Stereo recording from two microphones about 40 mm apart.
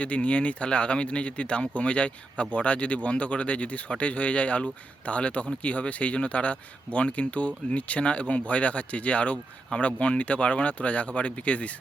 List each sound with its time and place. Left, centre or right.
0.0 s speech: left